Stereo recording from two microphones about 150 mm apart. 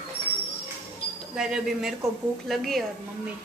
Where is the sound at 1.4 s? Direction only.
5° right (ahead or behind).